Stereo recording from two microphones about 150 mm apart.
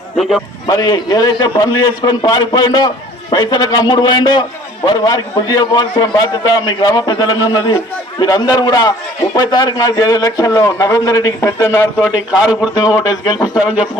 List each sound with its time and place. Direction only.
0.7 s a man's voice: 25° left (ahead or behind)
12.0 s a man's voice: 5° right (ahead or behind)
13.1 s a man's voice: 30° left (ahead or behind)
13.6 s a man's voice: 5° right (ahead or behind)